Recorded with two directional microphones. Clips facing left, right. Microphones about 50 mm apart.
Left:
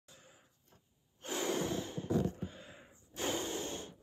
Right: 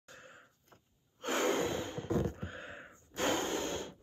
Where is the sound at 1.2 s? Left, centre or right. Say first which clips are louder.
Right 4 dB; right.